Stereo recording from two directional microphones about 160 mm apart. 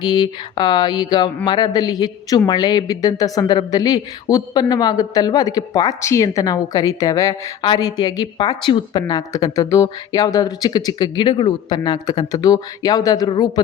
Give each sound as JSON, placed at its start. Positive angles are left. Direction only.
{"t": 0.0, "sound": "speech", "side_deg": 25}